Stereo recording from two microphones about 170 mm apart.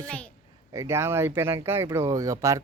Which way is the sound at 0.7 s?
15° right (ahead or behind).